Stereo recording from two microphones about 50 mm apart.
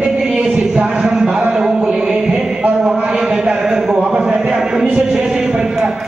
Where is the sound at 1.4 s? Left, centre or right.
Centre.